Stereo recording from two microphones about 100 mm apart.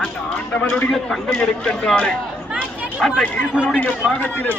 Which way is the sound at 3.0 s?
Centre (ahead or behind).